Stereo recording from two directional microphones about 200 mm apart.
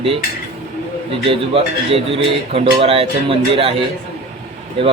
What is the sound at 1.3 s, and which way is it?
A man's voice, 30° right (ahead or behind).